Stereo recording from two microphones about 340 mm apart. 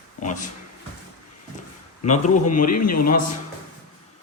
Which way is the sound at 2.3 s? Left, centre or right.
Left.